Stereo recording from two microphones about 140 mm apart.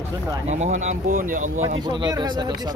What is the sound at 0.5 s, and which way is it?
Speech, 55° right (ahead or behind).